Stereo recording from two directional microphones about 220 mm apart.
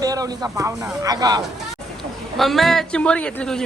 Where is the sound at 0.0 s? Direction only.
15° right (ahead or behind).